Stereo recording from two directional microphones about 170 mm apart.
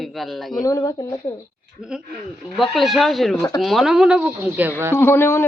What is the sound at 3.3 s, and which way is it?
Speech, 20° left (ahead or behind).